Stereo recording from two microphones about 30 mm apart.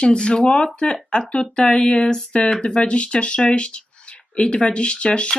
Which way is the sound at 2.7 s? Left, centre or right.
Left.